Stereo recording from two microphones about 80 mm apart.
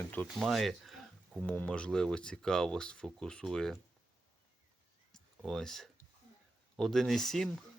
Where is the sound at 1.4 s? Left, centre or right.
Centre.